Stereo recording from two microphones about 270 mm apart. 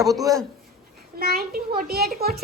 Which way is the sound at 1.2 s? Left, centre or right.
Right.